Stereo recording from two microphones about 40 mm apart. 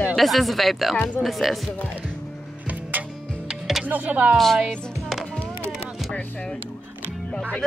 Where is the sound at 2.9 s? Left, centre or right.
Right.